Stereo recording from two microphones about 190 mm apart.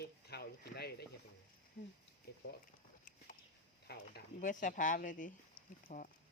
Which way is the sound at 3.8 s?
50° left (ahead or behind).